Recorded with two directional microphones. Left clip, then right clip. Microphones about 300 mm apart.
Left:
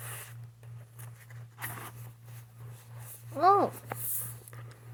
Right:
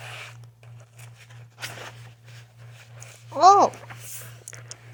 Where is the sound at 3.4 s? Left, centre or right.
Right.